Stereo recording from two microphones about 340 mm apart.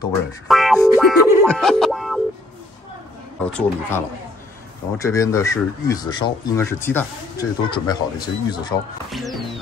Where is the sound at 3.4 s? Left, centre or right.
Centre.